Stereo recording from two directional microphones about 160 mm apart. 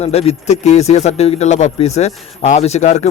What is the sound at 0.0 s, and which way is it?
Speech, 40° left (ahead or behind).